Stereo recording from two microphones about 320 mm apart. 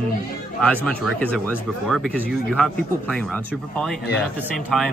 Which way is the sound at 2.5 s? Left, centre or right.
Centre.